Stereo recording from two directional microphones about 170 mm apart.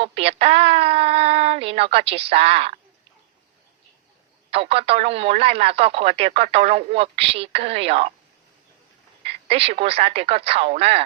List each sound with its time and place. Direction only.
0.0 s speech: 35° right (ahead or behind)
4.5 s speech: 35° right (ahead or behind)
9.2 s speech: 35° right (ahead or behind)